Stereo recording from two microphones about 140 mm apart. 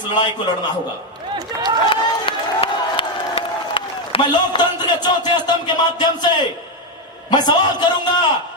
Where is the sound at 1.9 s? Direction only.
40° left (ahead or behind).